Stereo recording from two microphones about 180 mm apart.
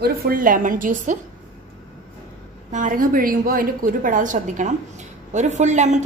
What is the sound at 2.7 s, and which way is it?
A woman's voice, 45° right (ahead or behind).